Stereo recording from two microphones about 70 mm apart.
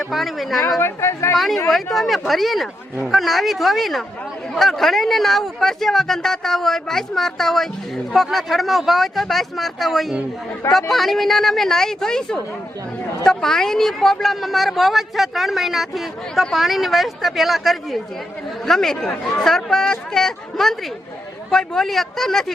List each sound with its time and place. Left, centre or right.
0.0 s speech: centre
0.8 s a woman's voice: left
1.7 s speech: centre